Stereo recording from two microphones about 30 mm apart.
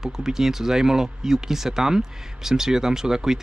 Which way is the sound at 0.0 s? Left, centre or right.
Centre.